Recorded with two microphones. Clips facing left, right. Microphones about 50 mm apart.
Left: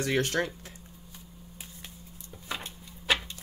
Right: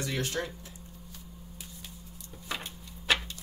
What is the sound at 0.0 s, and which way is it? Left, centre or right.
Speech, left.